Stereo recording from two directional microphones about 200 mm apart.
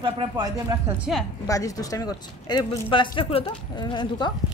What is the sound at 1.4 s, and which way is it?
A woman's voice, 15° left (ahead or behind).